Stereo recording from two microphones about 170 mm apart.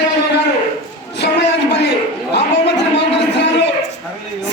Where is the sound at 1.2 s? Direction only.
80° left.